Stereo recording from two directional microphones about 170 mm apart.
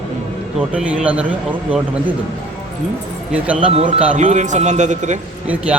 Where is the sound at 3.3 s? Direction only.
5° right (ahead or behind).